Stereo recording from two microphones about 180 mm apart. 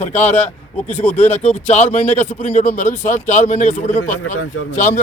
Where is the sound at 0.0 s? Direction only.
35° left (ahead or behind).